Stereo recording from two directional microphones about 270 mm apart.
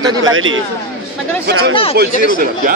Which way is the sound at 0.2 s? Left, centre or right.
Right.